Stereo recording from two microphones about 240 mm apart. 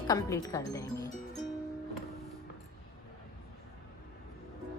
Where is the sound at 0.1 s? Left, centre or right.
Centre.